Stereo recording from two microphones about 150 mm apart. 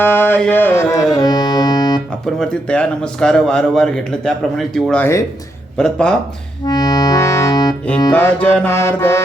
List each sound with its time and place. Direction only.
0.0 s music: 15° left (ahead or behind)
2.2 s a man's voice: 5° left (ahead or behind)
6.7 s accordion: 25° left (ahead or behind)
8.1 s music: 10° left (ahead or behind)